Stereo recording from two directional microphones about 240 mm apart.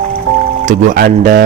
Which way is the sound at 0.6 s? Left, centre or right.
Right.